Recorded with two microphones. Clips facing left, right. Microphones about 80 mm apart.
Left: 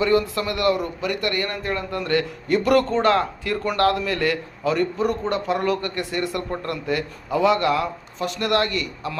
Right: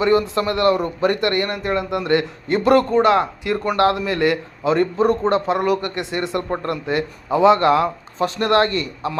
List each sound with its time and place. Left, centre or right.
0.0 s speech: right
1.4 s a man's voice: right
2.8 s a man's voice: centre; by 9.1 s right